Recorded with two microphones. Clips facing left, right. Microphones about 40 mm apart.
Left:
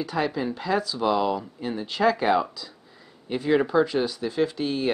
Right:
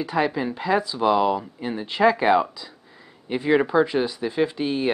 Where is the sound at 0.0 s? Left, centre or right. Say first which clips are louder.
Right 3 dB; centre.